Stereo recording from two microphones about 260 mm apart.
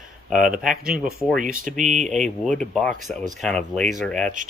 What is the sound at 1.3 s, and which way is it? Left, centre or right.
Speech, right.